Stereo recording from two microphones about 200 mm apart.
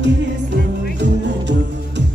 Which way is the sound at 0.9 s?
60° right (ahead or behind).